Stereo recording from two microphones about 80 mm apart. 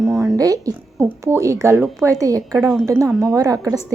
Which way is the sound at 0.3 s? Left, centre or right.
Right.